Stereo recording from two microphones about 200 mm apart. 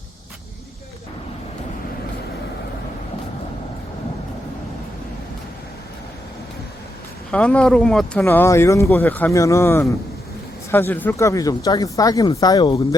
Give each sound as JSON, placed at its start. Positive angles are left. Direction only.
{"t": 7.3, "sound": "speech", "side_deg": 5}